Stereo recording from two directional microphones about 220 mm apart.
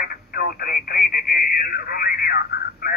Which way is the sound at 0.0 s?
45° left (ahead or behind).